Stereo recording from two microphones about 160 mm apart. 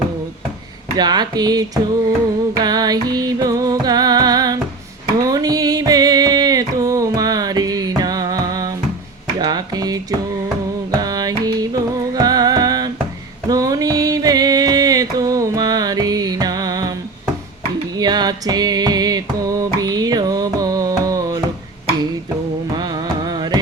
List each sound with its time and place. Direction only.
0.9 s speech: 25° right (ahead or behind)
2.6 s music: 25° right (ahead or behind)
17.9 s music: 25° right (ahead or behind)
19.8 s carnatic music: 25° right (ahead or behind)
22.7 s carnatic music: 25° right (ahead or behind)